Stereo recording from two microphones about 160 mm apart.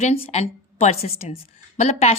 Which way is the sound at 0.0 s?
40° left (ahead or behind).